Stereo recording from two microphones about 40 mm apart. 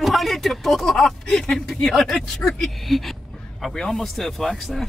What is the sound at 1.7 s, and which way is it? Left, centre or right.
Speech, centre.